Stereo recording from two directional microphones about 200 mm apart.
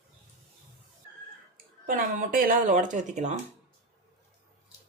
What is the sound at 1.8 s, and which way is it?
Speech, 45° right (ahead or behind).